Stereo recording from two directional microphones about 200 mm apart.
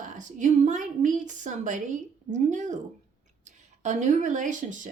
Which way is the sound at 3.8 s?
35° right (ahead or behind).